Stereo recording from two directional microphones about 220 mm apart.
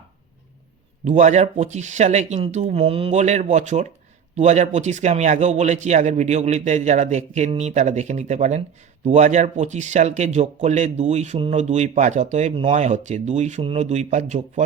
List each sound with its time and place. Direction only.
1.0 s speech: 35° right (ahead or behind)